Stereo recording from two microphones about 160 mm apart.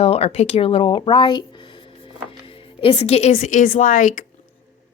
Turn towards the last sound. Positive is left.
turn(degrees=55)  # may be behind; listen again after turning